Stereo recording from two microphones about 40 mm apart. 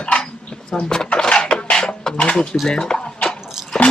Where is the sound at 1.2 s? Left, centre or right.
Centre.